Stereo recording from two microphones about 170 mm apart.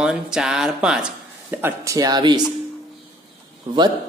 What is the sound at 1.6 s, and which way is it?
Speech, 15° right (ahead or behind).